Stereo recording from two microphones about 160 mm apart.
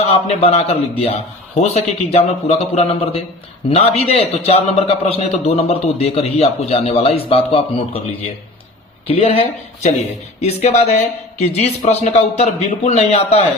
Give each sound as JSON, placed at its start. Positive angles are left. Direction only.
{"t": 0.0, "sound": "a man's voice", "side_deg": 40}
{"t": 9.0, "sound": "a man's voice", "side_deg": 35}